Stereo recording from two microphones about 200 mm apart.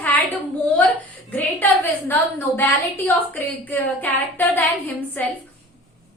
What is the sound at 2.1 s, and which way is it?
A woman's voice, 10° left (ahead or behind).